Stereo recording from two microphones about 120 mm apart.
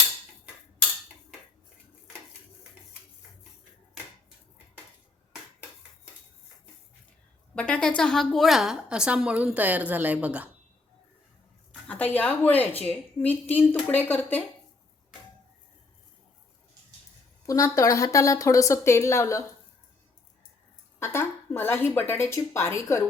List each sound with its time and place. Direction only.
7.5 s a woman's voice: 10° left (ahead or behind); by 10.5 s 10° right (ahead or behind)
11.9 s speech: 15° left (ahead or behind)
17.4 s a woman's voice: 30° left (ahead or behind)
21.0 s a woman's voice: 20° left (ahead or behind)